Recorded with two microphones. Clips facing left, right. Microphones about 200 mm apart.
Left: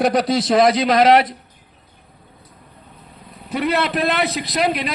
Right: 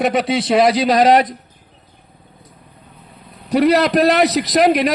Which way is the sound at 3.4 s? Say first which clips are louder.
Right 7 dB; 40° right (ahead or behind).